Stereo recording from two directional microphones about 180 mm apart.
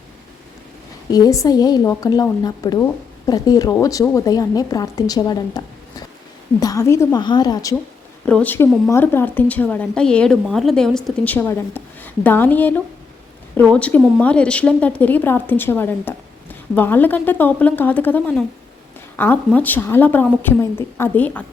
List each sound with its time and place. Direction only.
1.1 s speech: 20° left (ahead or behind)
8.2 s a woman's voice: 5° left (ahead or behind)